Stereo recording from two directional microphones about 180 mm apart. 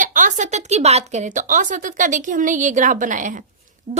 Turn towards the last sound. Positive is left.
turn(degrees=-45)  # may be behind; listen again after turning